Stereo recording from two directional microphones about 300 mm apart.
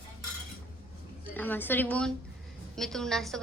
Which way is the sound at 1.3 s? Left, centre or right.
Centre.